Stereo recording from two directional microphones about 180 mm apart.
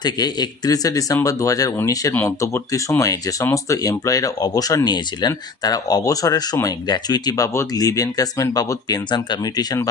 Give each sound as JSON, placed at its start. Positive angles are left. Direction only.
{"t": 0.0, "sound": "speech", "side_deg": 25}